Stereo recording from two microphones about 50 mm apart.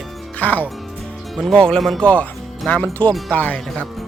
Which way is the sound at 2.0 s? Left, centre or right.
Left.